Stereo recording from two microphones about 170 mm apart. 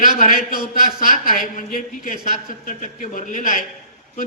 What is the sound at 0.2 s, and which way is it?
A man's voice, 55° left (ahead or behind).